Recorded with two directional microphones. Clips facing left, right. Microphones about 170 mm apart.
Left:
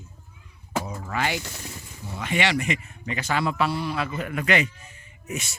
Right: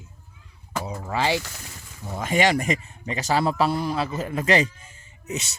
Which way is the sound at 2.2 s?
45° right (ahead or behind).